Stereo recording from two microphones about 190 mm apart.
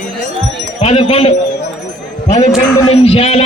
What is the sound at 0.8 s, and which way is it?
Speech, 30° left (ahead or behind).